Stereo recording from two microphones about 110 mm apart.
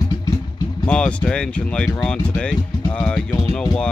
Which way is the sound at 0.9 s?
10° left (ahead or behind).